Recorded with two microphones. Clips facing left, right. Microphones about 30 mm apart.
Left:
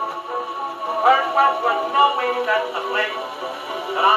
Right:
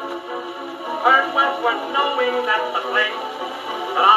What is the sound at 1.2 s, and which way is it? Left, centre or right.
Music, centre.